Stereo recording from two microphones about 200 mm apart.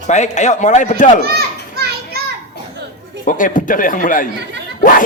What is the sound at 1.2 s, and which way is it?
Children playing, 50° right (ahead or behind).